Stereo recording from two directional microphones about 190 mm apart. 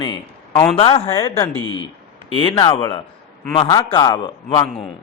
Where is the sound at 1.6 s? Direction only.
90° left.